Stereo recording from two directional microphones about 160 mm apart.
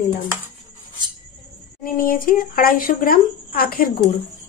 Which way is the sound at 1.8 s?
65° left (ahead or behind).